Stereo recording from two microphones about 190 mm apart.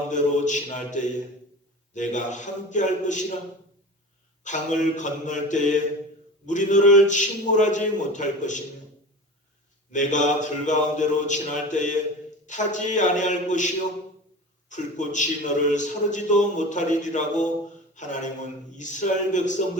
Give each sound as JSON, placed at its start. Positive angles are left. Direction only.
{"t": 0.1, "sound": "a man's voice", "side_deg": 40}
{"t": 4.4, "sound": "a man's voice", "side_deg": 40}
{"t": 9.9, "sound": "a man's voice", "side_deg": 40}